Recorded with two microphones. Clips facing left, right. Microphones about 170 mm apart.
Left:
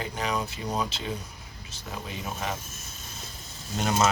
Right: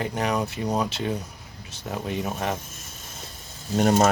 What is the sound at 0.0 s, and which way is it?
Speech, 65° right (ahead or behind).